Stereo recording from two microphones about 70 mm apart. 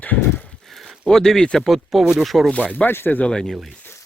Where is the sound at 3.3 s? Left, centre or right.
Centre.